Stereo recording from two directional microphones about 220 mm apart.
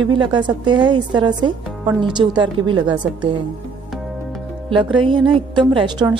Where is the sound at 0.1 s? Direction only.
20° right (ahead or behind).